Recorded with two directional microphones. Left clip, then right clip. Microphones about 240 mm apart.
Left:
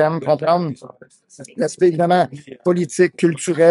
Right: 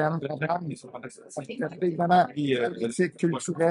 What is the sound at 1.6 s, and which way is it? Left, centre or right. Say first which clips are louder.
Speech: left 12 dB; left.